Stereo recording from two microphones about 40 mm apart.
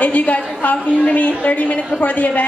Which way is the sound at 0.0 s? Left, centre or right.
Left.